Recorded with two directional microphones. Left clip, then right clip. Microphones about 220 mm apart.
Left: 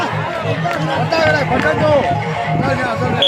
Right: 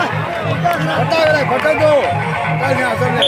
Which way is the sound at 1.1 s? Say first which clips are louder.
Right 1 dB; 40° right (ahead or behind).